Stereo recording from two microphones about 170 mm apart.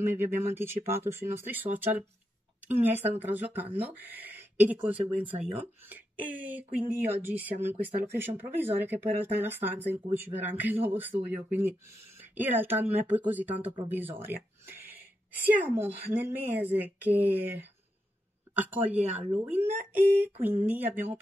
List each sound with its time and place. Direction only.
0.1 s speech: 15° right (ahead or behind)